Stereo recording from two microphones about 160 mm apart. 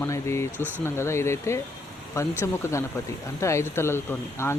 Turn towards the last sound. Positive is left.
turn(degrees=15)  # may be behind; listen again after turning